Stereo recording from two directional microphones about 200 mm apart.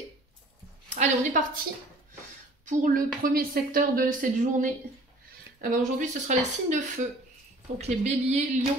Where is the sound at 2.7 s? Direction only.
45° right (ahead or behind).